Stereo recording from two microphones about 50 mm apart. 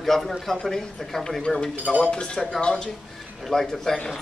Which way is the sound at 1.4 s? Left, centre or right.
Centre.